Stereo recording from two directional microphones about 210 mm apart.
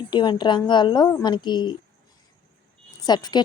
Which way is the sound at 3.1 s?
20° left (ahead or behind).